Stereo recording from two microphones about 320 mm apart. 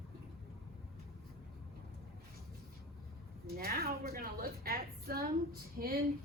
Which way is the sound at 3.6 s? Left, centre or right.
Right.